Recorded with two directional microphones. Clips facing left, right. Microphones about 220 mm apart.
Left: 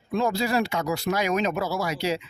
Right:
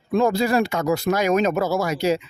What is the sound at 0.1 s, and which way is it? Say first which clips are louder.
Speech: right 5 dB; 50° right (ahead or behind).